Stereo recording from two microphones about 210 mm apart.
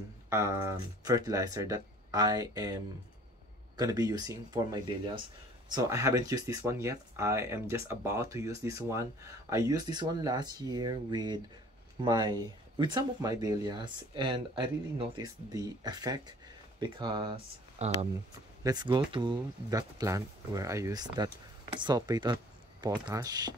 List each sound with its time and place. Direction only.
0.3 s speech: 10° right (ahead or behind)